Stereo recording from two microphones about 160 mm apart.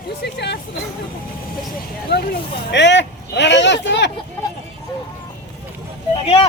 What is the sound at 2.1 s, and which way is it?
Speech, 90° left.